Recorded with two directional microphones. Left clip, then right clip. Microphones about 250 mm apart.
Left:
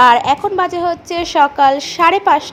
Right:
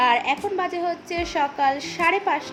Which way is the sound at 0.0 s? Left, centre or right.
Left.